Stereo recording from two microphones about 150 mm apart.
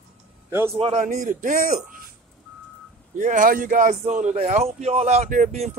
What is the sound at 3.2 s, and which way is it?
Speech, 60° right (ahead or behind).